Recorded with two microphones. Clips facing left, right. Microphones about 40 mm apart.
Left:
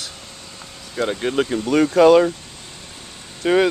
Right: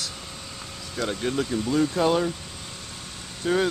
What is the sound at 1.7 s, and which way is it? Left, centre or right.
Speech, left.